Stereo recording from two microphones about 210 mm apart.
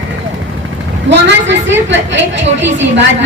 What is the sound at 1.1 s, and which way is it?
A woman's voice, 60° right (ahead or behind).